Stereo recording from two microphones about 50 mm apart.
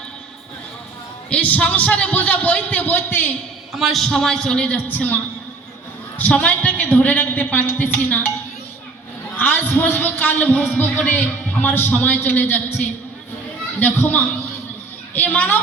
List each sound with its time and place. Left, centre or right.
1.3 s a man's voice: left
3.8 s a man's voice: centre
4.9 s a man's voice: left
9.4 s a man's voice: left
11.1 s a man's voice: left